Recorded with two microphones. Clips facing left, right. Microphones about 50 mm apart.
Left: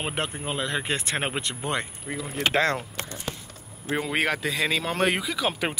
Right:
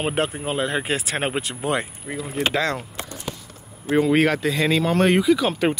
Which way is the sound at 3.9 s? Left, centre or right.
Centre.